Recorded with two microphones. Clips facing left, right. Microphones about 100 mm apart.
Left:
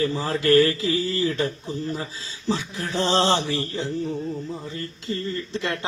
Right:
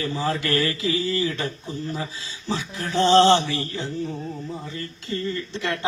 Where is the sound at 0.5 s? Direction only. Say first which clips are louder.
Left 5 dB; 35° left (ahead or behind).